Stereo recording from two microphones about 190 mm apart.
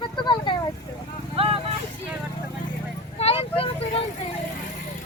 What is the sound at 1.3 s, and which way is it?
Vehicle, 30° right (ahead or behind).